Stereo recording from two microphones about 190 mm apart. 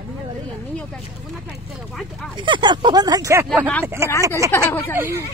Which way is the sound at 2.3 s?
25° right (ahead or behind).